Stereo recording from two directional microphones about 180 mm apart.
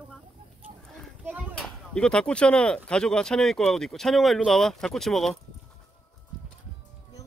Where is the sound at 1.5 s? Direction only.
5° left (ahead or behind).